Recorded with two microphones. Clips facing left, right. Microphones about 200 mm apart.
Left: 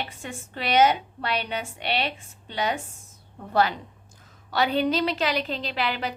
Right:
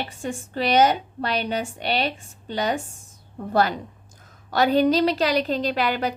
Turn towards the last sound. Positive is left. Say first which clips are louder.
# right 5 dB
turn(degrees=-45)  # may be behind; listen again after turning